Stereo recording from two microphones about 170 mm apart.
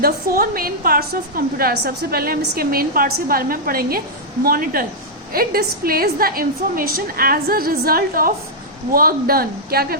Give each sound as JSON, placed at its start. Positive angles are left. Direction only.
{"t": 0.0, "sound": "a woman's voice", "side_deg": -60}